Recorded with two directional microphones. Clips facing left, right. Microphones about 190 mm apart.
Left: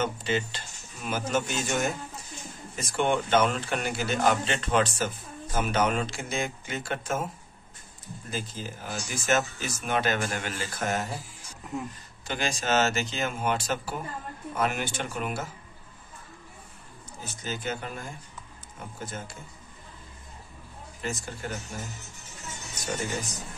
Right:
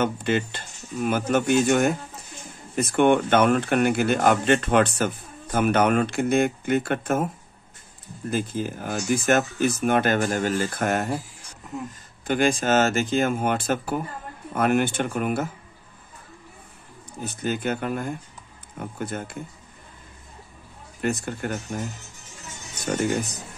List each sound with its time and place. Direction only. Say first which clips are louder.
0.0 s speech: right 5 dB; 55° right (ahead or behind)
8.3 s speech: right 9 dB; 55° right (ahead or behind)
12.3 s speech: right 8 dB; 55° right (ahead or behind)
17.2 s speech: right 8 dB; 60° right (ahead or behind)
21.0 s speech: right 8 dB; 60° right (ahead or behind)
22.8 s speech: right 8 dB; 60° right (ahead or behind)